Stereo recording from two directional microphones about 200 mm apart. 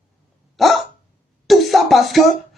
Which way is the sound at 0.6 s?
Centre (ahead or behind).